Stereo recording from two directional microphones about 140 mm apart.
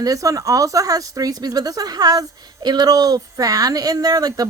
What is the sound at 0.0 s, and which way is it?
A woman's voice, 25° right (ahead or behind).